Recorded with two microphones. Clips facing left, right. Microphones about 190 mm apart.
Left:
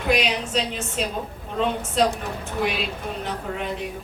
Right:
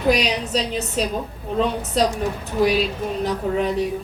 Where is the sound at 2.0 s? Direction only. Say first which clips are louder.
Right 2 dB; 40° right (ahead or behind).